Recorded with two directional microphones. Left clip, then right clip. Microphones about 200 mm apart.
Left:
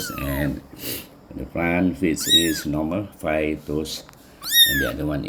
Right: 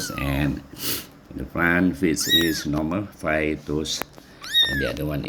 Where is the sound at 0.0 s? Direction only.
25° right (ahead or behind).